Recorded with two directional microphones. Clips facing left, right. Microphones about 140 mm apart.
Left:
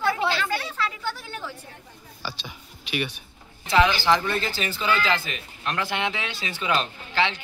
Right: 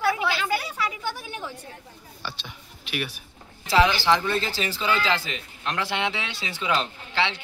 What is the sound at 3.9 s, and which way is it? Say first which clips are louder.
Speech: even; centre (ahead or behind).